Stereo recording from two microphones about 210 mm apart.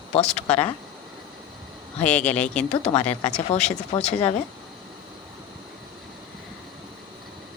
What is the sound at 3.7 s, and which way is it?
Speech, 30° left (ahead or behind).